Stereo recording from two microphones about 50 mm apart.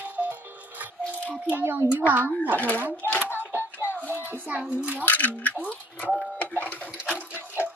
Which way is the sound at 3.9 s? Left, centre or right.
Right.